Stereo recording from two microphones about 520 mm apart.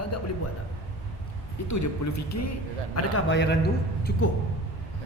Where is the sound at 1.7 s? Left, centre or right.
Left.